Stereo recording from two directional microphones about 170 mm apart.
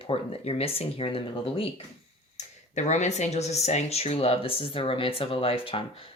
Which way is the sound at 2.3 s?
45° left (ahead or behind).